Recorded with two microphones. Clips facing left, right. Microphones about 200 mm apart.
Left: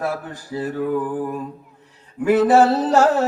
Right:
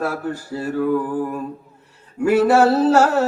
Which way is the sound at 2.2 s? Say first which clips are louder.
Even; 15° left (ahead or behind).